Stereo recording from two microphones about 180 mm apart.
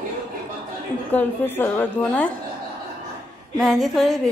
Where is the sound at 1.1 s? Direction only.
10° left (ahead or behind).